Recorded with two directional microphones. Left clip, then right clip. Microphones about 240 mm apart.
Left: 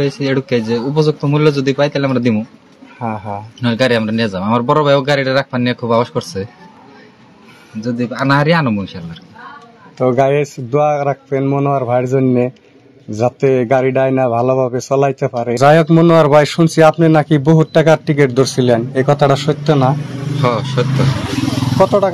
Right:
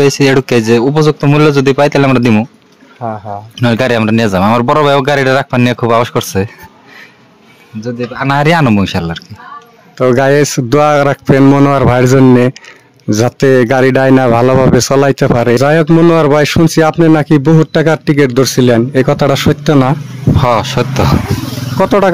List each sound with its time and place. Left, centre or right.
0.0 s a man's voice: right
3.0 s speech: centre
3.5 s speech: right
8.3 s a man's voice: right